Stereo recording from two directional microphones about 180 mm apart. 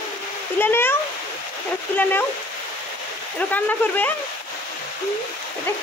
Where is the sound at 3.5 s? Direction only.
10° left (ahead or behind).